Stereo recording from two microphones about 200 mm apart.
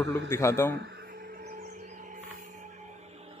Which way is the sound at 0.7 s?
55° right (ahead or behind).